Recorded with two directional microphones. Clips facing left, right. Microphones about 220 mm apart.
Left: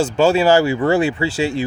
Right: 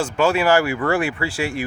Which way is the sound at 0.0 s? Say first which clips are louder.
Left 4 dB; 25° left (ahead or behind).